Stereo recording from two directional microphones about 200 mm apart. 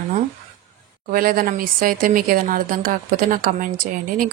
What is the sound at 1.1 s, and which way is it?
Speech, 45° right (ahead or behind).